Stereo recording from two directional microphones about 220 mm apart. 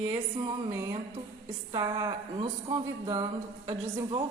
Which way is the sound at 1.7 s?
20° right (ahead or behind).